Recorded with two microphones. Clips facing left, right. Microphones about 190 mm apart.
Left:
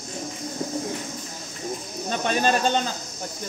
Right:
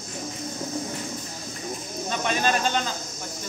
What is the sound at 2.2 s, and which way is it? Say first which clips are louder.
Speech: left 3 dB; 35° left (ahead or behind).